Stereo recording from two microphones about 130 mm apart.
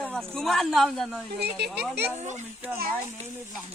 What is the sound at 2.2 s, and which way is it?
Speech, 65° right (ahead or behind).